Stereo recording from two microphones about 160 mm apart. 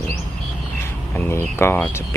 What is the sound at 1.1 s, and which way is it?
Speech, 15° left (ahead or behind).